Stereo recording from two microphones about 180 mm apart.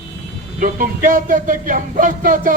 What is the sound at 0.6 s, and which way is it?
A man's voice, 50° right (ahead or behind).